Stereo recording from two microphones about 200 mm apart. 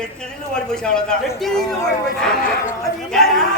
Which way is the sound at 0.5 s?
5° left (ahead or behind).